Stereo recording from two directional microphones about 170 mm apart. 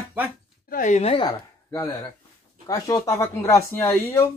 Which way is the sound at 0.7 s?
50° left (ahead or behind).